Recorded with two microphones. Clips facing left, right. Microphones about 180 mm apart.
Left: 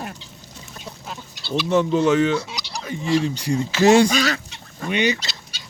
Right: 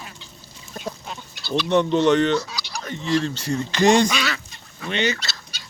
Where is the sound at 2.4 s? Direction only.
25° left (ahead or behind).